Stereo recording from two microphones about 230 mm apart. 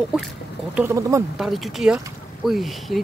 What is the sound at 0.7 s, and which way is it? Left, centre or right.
Speech, centre.